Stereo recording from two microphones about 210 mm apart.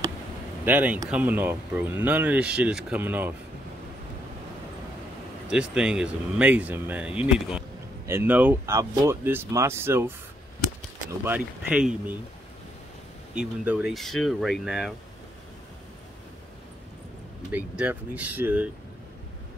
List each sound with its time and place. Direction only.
0.7 s speech: 10° right (ahead or behind)
5.5 s speech: 5° right (ahead or behind)
13.3 s speech: 5° right (ahead or behind)
17.5 s speech: 5° right (ahead or behind)